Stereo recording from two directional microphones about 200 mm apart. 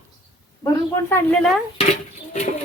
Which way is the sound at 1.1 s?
5° left (ahead or behind).